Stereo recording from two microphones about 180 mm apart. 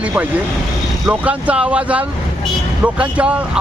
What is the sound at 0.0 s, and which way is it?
Speech, 10° right (ahead or behind).